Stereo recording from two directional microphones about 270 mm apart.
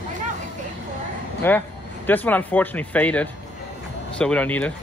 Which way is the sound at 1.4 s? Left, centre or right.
Centre.